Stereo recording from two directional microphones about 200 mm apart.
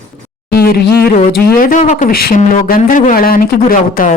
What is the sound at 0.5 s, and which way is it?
A man's voice, 50° left (ahead or behind).